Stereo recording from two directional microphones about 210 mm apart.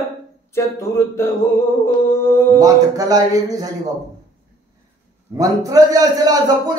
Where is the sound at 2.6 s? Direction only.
15° right (ahead or behind).